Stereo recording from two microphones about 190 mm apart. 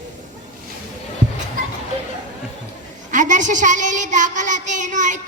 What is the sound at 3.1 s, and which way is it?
Child singing, 40° right (ahead or behind).